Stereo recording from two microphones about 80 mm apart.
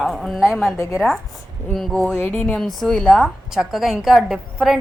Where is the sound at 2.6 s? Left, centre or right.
Centre.